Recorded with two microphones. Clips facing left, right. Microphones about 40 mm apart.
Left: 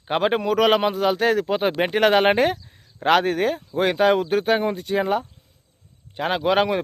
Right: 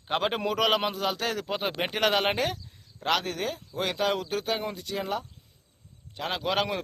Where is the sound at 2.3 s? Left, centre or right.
Left.